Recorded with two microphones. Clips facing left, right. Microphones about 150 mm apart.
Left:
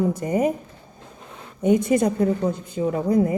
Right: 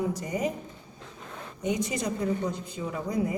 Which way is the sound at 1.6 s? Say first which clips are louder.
Left 11 dB; 55° left (ahead or behind).